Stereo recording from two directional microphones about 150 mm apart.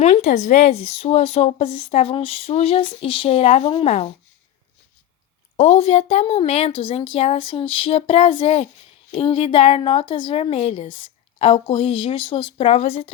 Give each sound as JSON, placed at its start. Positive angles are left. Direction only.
{"t": 0.0, "sound": "speech", "side_deg": 50}
{"t": 5.5, "sound": "a woman's voice", "side_deg": 45}